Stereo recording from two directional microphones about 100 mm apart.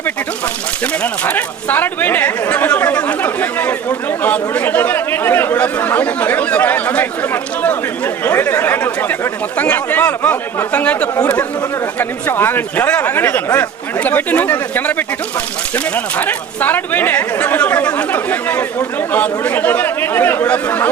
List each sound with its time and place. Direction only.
1.0 s speech: 15° left (ahead or behind)